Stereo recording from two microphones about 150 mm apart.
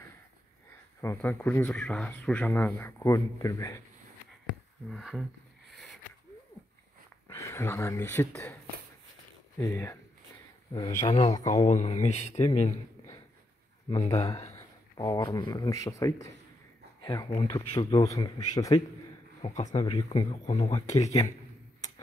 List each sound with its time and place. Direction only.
1.0 s speech: 15° left (ahead or behind)
4.8 s speech: centre (ahead or behind)
7.2 s speech: 20° left (ahead or behind)
9.6 s speech: 15° left (ahead or behind)
11.6 s speech: 50° left (ahead or behind)
13.8 s speech: 40° left (ahead or behind)
14.4 s speech: 20° left (ahead or behind)
19.4 s speech: 50° left (ahead or behind)